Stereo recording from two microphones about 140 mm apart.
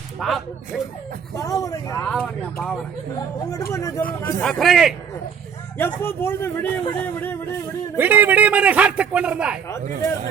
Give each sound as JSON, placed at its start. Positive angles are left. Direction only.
{"t": 0.2, "sound": "a man's voice", "side_deg": 0}
{"t": 1.5, "sound": "speech", "side_deg": 25}
{"t": 2.0, "sound": "speech", "side_deg": 10}
{"t": 3.5, "sound": "speech", "side_deg": 20}
{"t": 4.4, "sound": "a man's voice", "side_deg": 0}
{"t": 5.7, "sound": "speech", "side_deg": 15}
{"t": 7.9, "sound": "a man's voice", "side_deg": -15}